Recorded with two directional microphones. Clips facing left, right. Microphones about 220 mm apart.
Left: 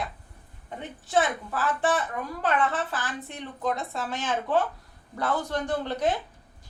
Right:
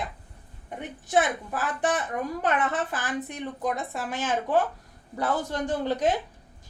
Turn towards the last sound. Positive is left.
turn(degrees=-15)  # may be behind; listen again after turning